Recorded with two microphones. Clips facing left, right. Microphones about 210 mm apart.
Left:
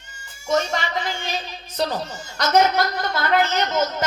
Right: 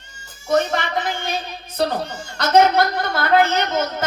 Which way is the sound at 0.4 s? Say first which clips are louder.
Right 3 dB; 60° right (ahead or behind).